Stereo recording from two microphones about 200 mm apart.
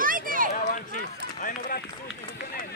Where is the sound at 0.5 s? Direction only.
40° left (ahead or behind).